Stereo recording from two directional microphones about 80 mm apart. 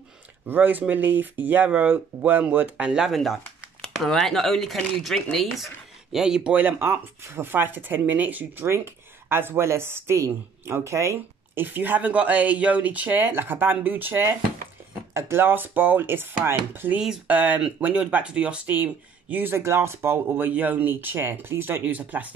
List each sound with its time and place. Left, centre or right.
0.5 s speech: right
3.8 s speech: centre
6.5 s speech: right
8.6 s speech: right
11.6 s speech: right